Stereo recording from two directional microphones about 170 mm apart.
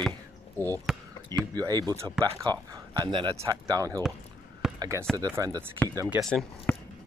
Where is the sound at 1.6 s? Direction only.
20° right (ahead or behind).